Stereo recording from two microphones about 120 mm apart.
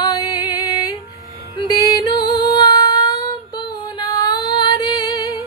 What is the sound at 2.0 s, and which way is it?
Music, 35° left (ahead or behind).